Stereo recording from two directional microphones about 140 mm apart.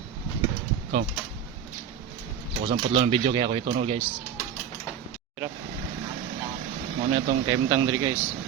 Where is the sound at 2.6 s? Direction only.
40° right (ahead or behind).